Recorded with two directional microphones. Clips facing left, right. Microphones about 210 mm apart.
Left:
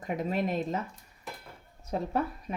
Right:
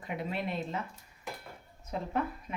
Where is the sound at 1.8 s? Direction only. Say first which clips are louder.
Left 3 dB; 40° left (ahead or behind).